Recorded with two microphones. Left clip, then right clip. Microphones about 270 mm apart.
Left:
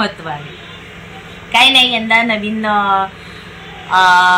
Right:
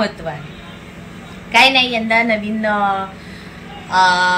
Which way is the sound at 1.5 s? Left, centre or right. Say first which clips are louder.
Left 2 dB; centre.